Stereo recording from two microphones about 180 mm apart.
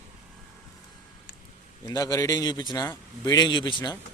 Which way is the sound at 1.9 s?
20° left (ahead or behind).